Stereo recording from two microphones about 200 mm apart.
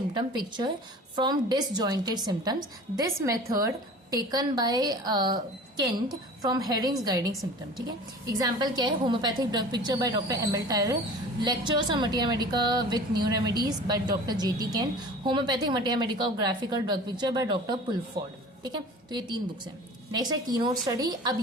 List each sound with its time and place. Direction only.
0.1 s a woman's voice: 20° right (ahead or behind)